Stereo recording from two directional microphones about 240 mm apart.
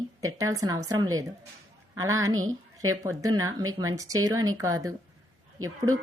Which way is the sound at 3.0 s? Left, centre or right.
Centre.